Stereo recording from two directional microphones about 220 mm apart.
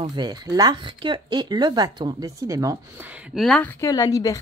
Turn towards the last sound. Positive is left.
turn(degrees=15)  # may be behind; listen again after turning